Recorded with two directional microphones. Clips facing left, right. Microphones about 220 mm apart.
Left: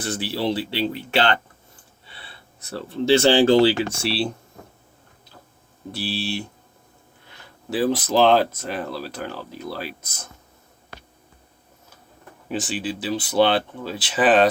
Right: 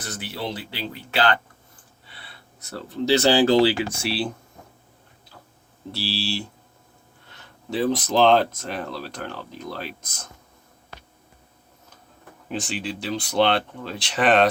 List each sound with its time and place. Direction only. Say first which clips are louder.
0.0 s speech: left 7 dB; 30° left (ahead or behind)
6.1 s speech: left 1 dB; 20° left (ahead or behind)
7.7 s speech: left 2 dB; 5° left (ahead or behind)
12.5 s speech: left 2 dB; 5° left (ahead or behind)